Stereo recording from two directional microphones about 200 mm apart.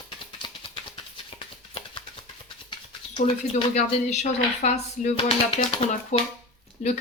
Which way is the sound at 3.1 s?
30° left (ahead or behind).